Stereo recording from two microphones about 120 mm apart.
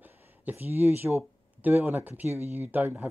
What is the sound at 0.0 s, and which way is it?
Speech, 15° right (ahead or behind).